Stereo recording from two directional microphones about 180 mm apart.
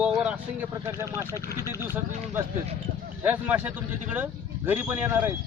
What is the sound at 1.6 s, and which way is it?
Speech, 20° left (ahead or behind).